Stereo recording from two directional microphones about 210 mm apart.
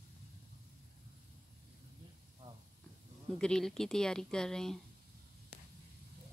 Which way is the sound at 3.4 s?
5° left (ahead or behind).